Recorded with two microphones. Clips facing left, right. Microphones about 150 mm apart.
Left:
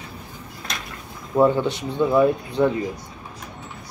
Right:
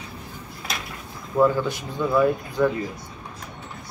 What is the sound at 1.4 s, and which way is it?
Speech, 25° left (ahead or behind).